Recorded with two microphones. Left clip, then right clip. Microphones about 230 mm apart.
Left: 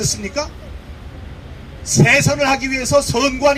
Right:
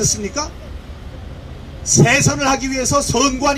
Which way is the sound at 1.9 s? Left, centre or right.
Left.